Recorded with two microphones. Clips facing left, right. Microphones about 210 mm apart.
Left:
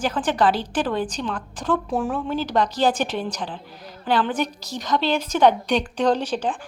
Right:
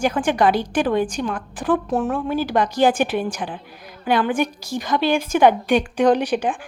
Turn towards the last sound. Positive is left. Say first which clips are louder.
# right 4 dB
turn(degrees=-15)  # may be behind; listen again after turning